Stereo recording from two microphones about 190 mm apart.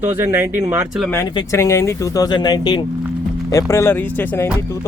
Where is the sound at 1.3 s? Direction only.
15° left (ahead or behind).